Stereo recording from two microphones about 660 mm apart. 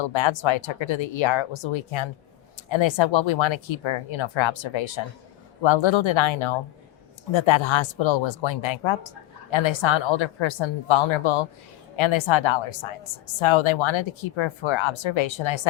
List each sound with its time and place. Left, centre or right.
0.0 s speech: left